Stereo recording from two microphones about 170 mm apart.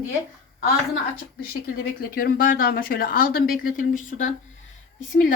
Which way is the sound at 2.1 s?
60° left (ahead or behind).